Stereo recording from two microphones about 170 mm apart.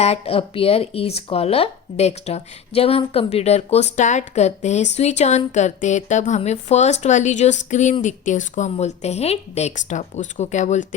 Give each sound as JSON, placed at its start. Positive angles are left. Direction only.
{"t": 0.0, "sound": "a woman's voice", "side_deg": 35}